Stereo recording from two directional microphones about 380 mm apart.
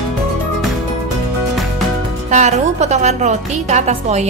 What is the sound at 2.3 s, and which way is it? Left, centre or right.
A woman's voice, centre.